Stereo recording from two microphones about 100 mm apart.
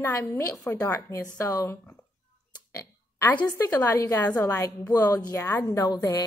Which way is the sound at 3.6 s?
30° left (ahead or behind).